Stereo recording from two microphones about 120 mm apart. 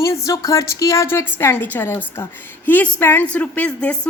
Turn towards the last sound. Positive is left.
turn(degrees=10)  # may be behind; listen again after turning